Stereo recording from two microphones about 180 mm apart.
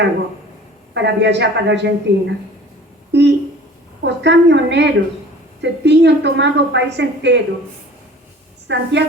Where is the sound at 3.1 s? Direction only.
70° right (ahead or behind).